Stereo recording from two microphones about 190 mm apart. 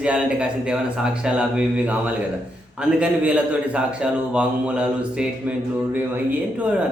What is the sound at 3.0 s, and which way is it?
A man's voice, 5° right (ahead or behind).